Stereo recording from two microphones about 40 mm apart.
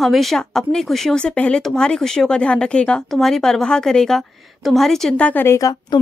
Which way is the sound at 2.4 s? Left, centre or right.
Left.